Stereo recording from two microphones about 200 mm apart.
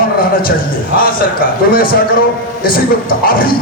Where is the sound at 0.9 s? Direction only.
45° left (ahead or behind).